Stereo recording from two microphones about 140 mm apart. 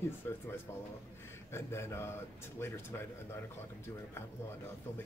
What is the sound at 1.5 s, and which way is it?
A man's voice, 20° left (ahead or behind).